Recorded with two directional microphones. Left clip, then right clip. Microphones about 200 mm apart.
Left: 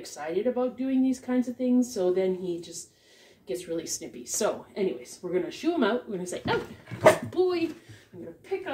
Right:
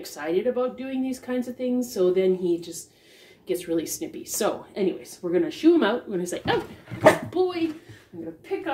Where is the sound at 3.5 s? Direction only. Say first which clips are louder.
Right 5 dB; 30° right (ahead or behind).